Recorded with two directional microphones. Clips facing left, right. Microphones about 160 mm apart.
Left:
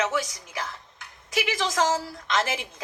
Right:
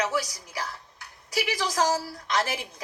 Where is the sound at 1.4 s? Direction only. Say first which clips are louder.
Left 1 dB; 20° left (ahead or behind).